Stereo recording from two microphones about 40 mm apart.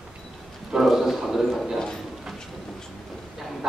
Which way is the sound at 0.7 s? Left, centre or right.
Centre.